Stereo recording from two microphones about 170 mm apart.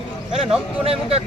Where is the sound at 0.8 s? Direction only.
35° right (ahead or behind).